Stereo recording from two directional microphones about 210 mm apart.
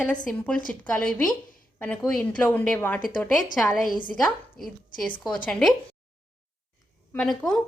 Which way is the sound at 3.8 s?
40° left (ahead or behind).